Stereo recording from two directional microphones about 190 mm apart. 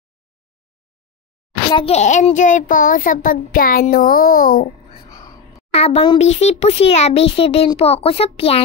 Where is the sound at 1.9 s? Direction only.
35° left (ahead or behind).